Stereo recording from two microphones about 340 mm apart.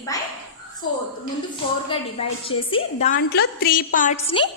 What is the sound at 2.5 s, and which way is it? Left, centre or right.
A woman's voice, centre.